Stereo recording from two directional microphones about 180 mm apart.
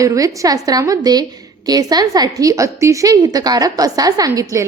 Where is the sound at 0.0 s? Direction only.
20° right (ahead or behind).